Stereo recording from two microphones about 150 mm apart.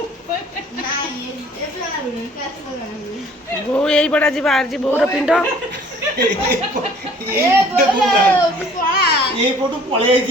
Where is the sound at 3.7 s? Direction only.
5° left (ahead or behind).